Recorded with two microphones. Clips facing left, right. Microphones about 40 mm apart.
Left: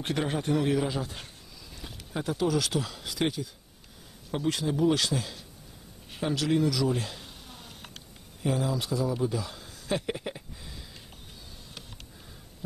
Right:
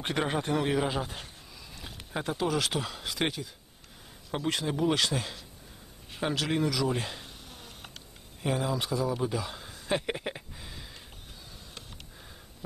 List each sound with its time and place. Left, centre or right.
0.0 s speech: centre
4.5 s speech: centre
8.4 s a man's voice: centre
10.1 s a sound: right